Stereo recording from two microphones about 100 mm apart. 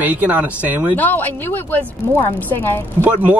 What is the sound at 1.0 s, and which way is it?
Speech, 20° left (ahead or behind).